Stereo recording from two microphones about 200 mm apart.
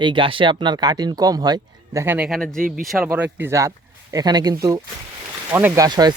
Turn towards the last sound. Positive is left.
turn(degrees=-20)  # may be behind; listen again after turning